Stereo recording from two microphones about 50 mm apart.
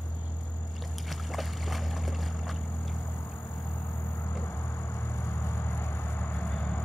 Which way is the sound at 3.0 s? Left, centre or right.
Left.